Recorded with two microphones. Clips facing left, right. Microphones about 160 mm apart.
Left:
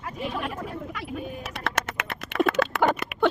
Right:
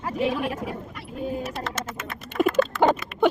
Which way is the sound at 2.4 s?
70° left (ahead or behind).